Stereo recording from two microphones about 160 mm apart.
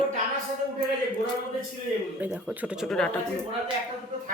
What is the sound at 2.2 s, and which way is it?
Speech, 10° right (ahead or behind).